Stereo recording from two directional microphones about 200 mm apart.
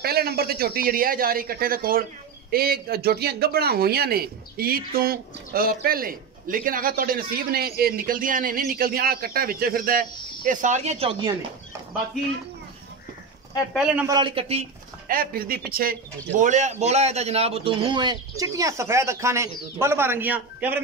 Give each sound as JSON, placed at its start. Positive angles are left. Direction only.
{"t": 0.0, "sound": "speech", "side_deg": -50}
{"t": 14.0, "sound": "speech", "side_deg": -20}
{"t": 15.0, "sound": "speech", "side_deg": -45}